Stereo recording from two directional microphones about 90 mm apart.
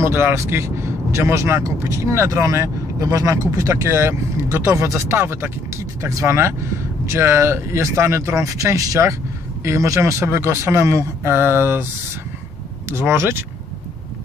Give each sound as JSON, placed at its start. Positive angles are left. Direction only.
{"t": 0.0, "sound": "speech", "side_deg": -30}
{"t": 12.9, "sound": "speech", "side_deg": -25}